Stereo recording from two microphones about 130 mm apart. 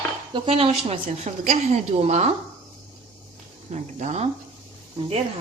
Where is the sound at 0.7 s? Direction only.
60° right (ahead or behind).